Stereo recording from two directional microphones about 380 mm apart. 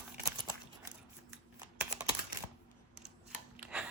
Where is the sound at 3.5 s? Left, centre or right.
Centre.